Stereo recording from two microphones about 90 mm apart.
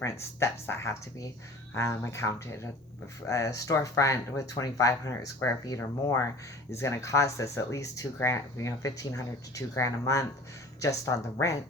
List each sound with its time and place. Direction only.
0.0 s speech: 30° left (ahead or behind)